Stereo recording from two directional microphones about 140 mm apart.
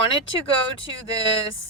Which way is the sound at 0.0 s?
40° left (ahead or behind).